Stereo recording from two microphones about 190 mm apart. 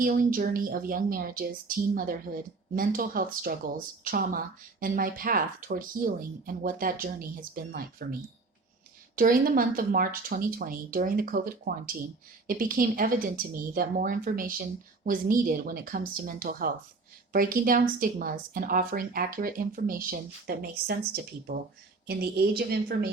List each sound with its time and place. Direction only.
0.0 s a woman's voice: 50° right (ahead or behind)
9.1 s a woman's voice: 50° right (ahead or behind)
22.0 s a woman's voice: 55° right (ahead or behind)